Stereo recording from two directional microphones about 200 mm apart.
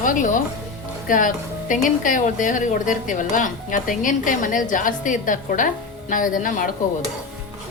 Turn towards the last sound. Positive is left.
turn(degrees=40)  # may be behind; listen again after turning